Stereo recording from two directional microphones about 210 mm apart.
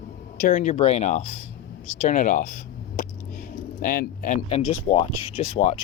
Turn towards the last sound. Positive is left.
turn(degrees=30)  # may be behind; listen again after turning